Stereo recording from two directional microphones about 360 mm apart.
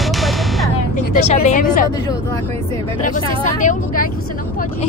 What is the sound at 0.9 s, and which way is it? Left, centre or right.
Speech, centre.